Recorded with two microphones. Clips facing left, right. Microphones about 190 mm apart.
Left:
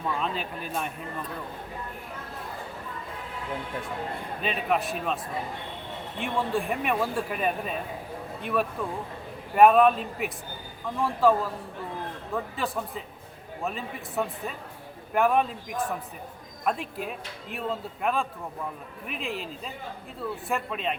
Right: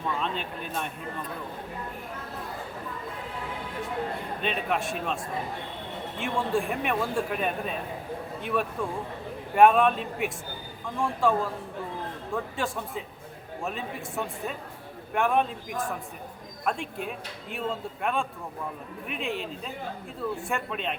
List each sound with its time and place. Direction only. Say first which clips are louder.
0.2 s speech: left 1 dB; 5° left (ahead or behind)
4.4 s speech: left 2 dB; centre (ahead or behind)
16.6 s speech: left 1 dB; centre (ahead or behind)